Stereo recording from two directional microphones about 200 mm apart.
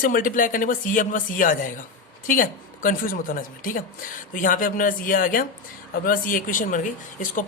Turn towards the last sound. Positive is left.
turn(degrees=40)  # may be behind; listen again after turning